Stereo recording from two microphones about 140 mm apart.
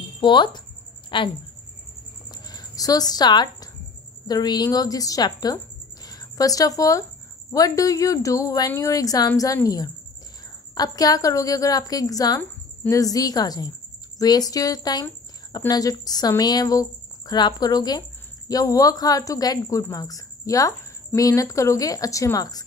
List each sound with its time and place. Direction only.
0.2 s speech: 35° left (ahead or behind)
2.3 s a sound: 30° left (ahead or behind)
4.3 s a woman's voice: 30° left (ahead or behind)